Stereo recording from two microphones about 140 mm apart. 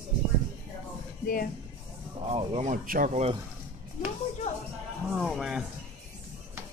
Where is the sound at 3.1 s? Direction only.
50° right (ahead or behind).